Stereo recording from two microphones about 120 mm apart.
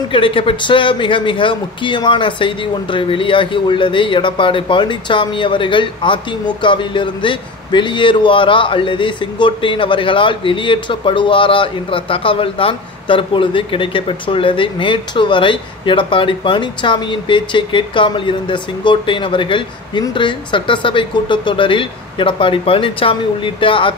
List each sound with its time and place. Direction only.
0.1 s a man's voice: 45° left (ahead or behind)